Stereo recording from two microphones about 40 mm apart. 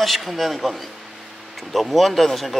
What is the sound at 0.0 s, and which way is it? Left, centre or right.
Speech, centre.